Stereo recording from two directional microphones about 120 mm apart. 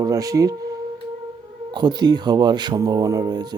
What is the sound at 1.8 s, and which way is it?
Speech, 35° right (ahead or behind).